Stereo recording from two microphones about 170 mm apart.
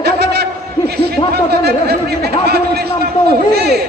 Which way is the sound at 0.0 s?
75° right (ahead or behind).